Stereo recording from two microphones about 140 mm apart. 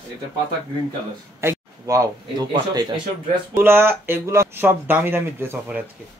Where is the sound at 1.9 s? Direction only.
25° right (ahead or behind).